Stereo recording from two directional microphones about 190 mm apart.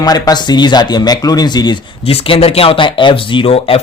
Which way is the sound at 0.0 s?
20° left (ahead or behind).